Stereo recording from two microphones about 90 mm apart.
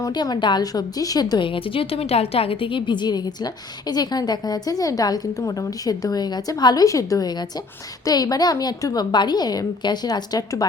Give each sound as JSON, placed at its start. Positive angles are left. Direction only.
{"t": 0.1, "sound": "a woman's voice", "side_deg": 50}
{"t": 1.5, "sound": "a woman's voice", "side_deg": 75}